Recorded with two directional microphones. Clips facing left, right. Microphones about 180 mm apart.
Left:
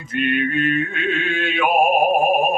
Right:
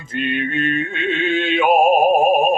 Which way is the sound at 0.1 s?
30° right (ahead or behind).